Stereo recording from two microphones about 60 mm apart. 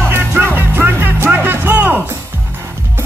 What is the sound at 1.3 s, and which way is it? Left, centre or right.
Music, right.